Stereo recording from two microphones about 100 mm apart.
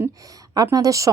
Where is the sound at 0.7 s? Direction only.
35° right (ahead or behind).